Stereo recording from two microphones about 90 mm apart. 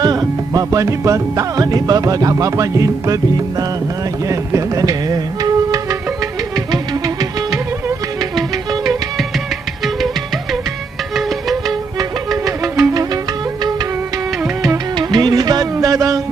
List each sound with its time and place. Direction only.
0.0 s music: 45° right (ahead or behind)
4.3 s music: 35° right (ahead or behind)
11.1 s music: centre (ahead or behind)
12.5 s music: 35° right (ahead or behind)
14.9 s music: 45° right (ahead or behind)